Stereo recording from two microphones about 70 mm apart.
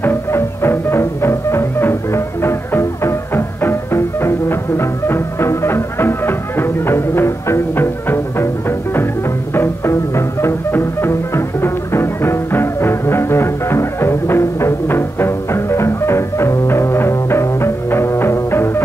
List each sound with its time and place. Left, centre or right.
0.0 s music: left